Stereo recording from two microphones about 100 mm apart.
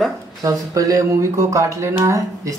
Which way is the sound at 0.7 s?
35° right (ahead or behind).